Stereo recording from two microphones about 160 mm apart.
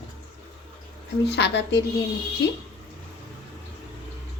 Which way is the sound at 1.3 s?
90° left.